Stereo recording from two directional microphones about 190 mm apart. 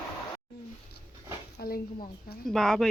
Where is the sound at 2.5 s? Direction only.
Centre (ahead or behind).